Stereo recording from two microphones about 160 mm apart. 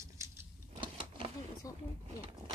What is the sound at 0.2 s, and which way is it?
Vehicle, 20° right (ahead or behind).